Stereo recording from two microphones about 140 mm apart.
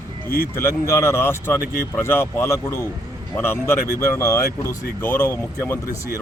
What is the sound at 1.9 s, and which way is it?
A man's voice, 15° left (ahead or behind).